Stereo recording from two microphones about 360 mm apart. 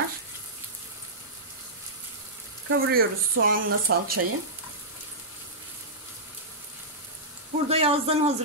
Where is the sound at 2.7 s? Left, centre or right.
Right.